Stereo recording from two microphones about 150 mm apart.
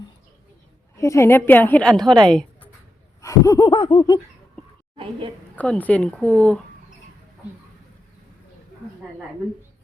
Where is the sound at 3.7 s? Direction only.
35° left (ahead or behind).